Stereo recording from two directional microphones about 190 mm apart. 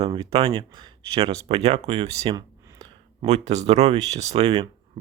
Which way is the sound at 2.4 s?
20° right (ahead or behind).